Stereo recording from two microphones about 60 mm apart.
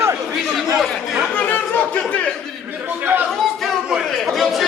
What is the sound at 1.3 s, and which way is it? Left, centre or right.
Speech, left.